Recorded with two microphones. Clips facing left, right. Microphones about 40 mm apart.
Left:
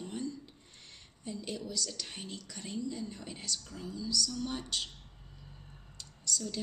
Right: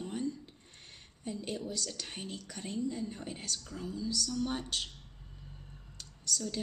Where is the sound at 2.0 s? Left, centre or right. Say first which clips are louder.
Right 2 dB; right.